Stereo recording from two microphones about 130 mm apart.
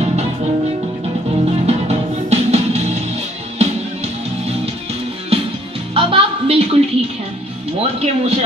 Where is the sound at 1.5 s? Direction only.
55° right (ahead or behind).